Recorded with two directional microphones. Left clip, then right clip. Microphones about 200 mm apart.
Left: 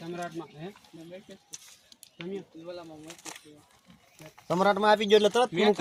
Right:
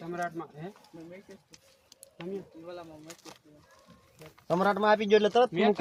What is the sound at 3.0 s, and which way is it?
Speech, 35° left (ahead or behind).